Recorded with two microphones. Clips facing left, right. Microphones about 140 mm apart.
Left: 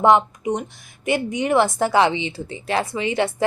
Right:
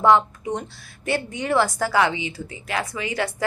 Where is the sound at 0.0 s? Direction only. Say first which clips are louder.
Left 2 dB; 20° left (ahead or behind).